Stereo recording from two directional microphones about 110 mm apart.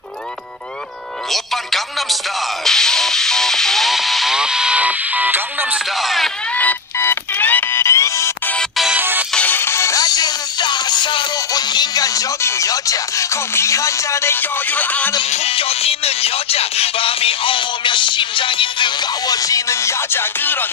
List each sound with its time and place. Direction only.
1.3 s speech: centre (ahead or behind); by 5.8 s 15° right (ahead or behind)
5.9 s speech: centre (ahead or behind)
6.5 s music: 15° left (ahead or behind)
8.9 s music: 15° right (ahead or behind)
9.3 s music: 15° left (ahead or behind)
15.2 s music: 75° left (ahead or behind); by 20.6 s 20° left (ahead or behind)